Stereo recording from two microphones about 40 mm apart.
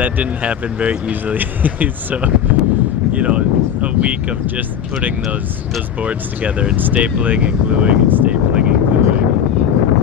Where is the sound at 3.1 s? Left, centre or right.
Right.